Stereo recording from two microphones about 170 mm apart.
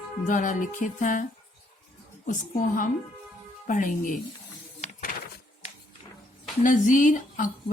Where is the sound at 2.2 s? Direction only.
50° left (ahead or behind).